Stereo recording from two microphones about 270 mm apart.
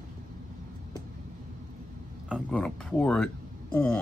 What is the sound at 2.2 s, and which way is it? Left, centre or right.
Speech, centre.